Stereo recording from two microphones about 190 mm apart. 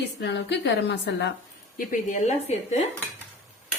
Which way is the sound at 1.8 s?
45° left (ahead or behind).